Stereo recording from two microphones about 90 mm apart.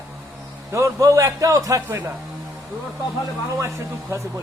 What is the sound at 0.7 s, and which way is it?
A man's voice, 35° right (ahead or behind).